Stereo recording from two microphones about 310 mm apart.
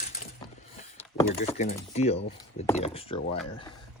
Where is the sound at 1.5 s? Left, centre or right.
Left.